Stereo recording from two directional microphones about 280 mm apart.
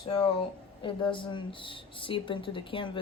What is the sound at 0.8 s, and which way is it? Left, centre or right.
Speech, centre.